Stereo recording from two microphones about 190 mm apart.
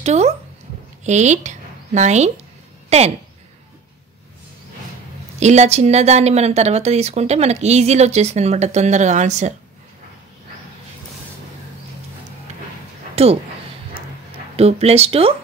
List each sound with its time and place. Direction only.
0.0 s speech: 35° right (ahead or behind)
5.4 s speech: 35° right (ahead or behind)
13.1 s speech: 30° right (ahead or behind)
14.6 s speech: 35° right (ahead or behind)